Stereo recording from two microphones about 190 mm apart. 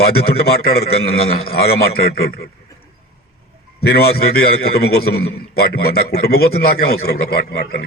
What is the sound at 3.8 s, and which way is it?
A man's voice, 55° left (ahead or behind).